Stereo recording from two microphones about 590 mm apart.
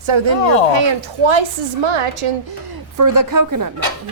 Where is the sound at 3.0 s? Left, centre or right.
Right.